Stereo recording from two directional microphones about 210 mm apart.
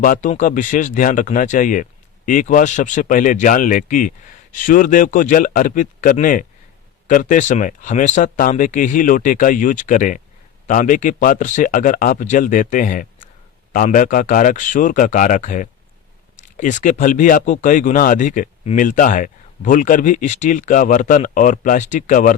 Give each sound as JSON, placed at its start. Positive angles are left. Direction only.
{"t": 0.0, "sound": "speech", "side_deg": 40}